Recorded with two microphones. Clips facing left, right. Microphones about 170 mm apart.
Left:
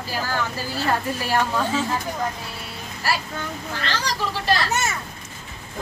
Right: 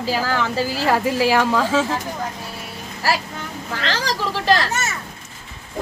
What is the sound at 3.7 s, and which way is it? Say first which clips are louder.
Speech: right 5 dB; 90° right.